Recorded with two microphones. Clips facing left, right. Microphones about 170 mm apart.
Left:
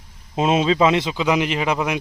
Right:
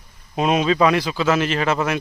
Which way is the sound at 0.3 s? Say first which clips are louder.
Even; 25° left (ahead or behind).